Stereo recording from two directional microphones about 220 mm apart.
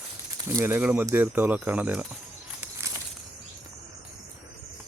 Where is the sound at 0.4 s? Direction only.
10° right (ahead or behind).